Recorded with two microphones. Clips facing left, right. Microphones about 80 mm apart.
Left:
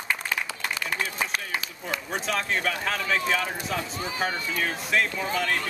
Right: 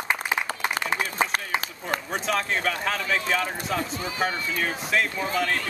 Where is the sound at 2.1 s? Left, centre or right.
Centre.